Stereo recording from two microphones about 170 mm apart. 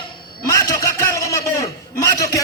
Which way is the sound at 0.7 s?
20° left (ahead or behind).